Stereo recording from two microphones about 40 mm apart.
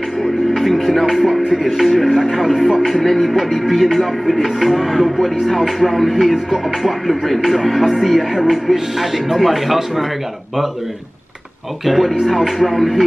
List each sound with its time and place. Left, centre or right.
0.6 s music: centre
11.8 s music: centre